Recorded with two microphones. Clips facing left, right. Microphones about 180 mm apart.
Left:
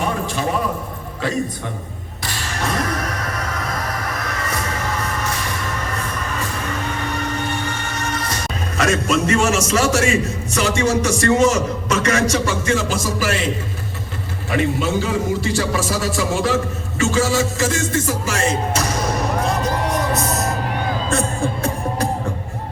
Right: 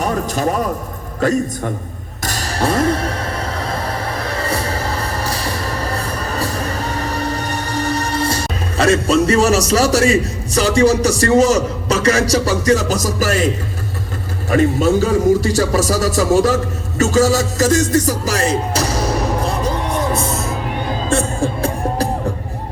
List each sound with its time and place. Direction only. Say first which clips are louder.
0.0 s a sound: right 3 dB; 40° right (ahead or behind)
1.2 s a man's voice: right 7 dB; 45° right (ahead or behind)
2.2 s music: right 6 dB; 40° right (ahead or behind)
14.5 s a man's voice: right 6 dB; 40° right (ahead or behind)
17.0 s music: right 4 dB; 40° right (ahead or behind)
21.1 s music: right 5 dB; 30° right (ahead or behind)